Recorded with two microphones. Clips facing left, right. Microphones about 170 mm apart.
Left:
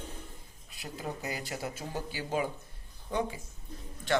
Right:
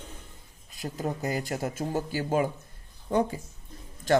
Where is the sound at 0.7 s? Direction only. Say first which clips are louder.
Right 7 dB; 45° right (ahead or behind).